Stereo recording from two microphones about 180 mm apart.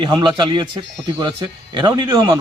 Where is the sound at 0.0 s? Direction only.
25° right (ahead or behind).